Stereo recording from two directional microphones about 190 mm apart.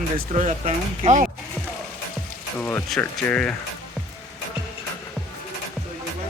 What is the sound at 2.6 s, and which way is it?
Speech, 15° left (ahead or behind).